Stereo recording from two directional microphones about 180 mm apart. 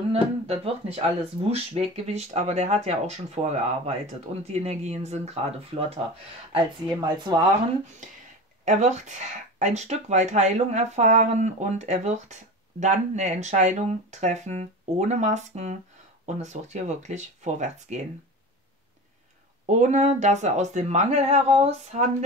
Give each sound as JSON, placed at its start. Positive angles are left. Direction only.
{"t": 0.1, "sound": "speech", "side_deg": -35}
{"t": 6.5, "sound": "speech", "side_deg": -25}
{"t": 8.6, "sound": "speech", "side_deg": -40}
{"t": 19.6, "sound": "speech", "side_deg": -40}